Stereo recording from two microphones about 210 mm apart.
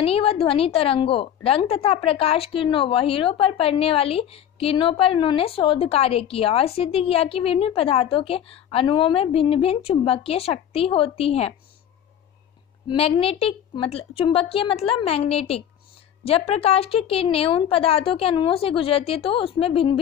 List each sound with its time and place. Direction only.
0.0 s a woman's voice: 25° left (ahead or behind)
12.8 s a woman's voice: 25° left (ahead or behind)